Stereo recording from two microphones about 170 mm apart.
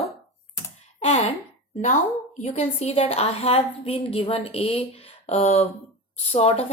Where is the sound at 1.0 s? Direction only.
40° left (ahead or behind).